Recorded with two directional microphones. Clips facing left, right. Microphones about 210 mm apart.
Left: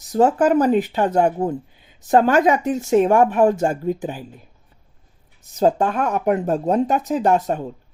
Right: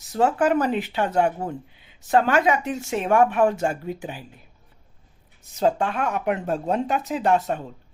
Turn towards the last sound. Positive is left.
turn(degrees=40)  # may be behind; listen again after turning